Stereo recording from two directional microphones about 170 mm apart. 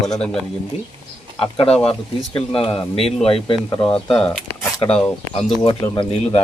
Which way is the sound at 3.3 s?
35° left (ahead or behind).